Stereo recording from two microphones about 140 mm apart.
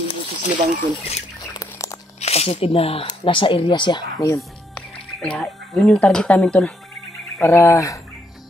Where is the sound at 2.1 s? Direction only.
50° left (ahead or behind).